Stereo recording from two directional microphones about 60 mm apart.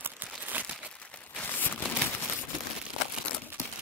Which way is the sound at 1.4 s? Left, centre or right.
Left.